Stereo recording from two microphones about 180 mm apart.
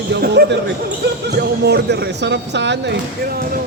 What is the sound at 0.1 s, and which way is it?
Speech, 65° right (ahead or behind).